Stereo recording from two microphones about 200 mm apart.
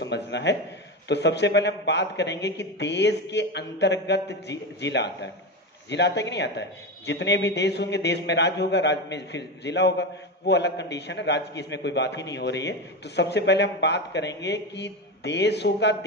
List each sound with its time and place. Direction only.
0.0 s a man's voice: 60° left (ahead or behind)